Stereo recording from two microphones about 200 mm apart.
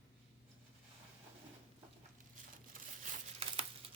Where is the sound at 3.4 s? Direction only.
30° right (ahead or behind).